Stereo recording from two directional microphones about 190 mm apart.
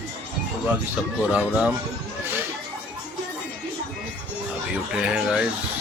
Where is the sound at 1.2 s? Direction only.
5° right (ahead or behind).